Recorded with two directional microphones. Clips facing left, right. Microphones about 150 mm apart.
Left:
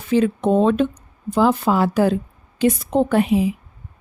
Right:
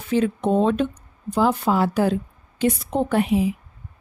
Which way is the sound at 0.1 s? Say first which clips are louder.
Left 3 dB; 90° left.